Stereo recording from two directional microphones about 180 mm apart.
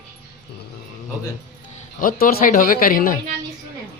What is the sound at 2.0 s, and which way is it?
Speech, 50° left (ahead or behind).